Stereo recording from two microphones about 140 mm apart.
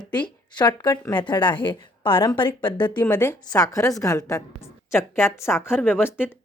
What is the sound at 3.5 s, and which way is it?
A woman's voice, 25° left (ahead or behind).